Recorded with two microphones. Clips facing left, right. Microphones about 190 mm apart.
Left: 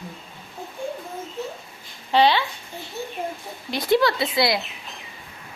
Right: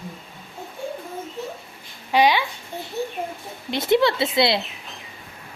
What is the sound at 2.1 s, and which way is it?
Speech, 15° right (ahead or behind).